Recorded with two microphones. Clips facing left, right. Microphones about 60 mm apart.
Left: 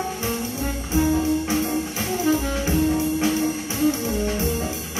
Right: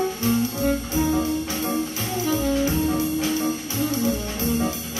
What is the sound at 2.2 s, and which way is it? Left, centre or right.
Jazz, left.